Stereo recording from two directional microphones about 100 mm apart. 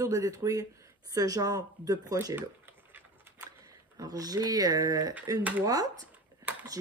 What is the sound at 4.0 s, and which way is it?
A woman's voice, 40° right (ahead or behind).